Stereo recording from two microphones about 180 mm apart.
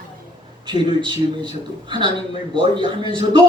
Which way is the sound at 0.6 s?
25° right (ahead or behind).